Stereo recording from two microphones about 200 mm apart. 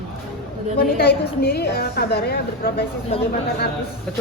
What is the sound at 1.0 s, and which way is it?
A woman's voice, 50° left (ahead or behind).